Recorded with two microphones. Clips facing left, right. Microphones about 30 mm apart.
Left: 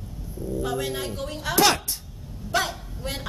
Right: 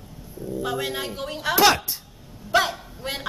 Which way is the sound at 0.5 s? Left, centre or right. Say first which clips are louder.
Right 1 dB; centre.